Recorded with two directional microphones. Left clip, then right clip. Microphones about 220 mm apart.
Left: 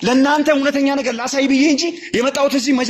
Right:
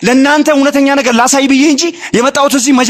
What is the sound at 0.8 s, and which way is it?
A man's voice, 40° right (ahead or behind).